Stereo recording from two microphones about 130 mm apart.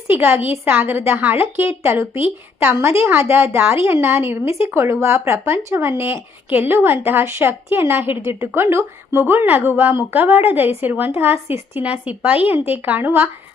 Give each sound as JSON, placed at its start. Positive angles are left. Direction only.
{"t": 0.1, "sound": "a woman's voice", "side_deg": -15}